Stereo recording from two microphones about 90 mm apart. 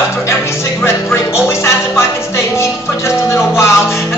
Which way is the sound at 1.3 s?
30° left (ahead or behind).